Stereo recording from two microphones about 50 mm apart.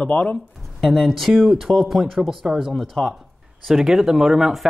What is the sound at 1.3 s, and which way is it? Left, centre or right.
Speech, centre.